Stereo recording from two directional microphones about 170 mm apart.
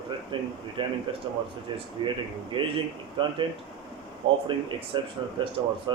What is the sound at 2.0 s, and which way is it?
Speech, 25° right (ahead or behind).